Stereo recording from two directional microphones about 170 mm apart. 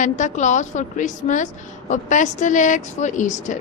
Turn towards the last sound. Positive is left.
turn(degrees=45)  # may be behind; listen again after turning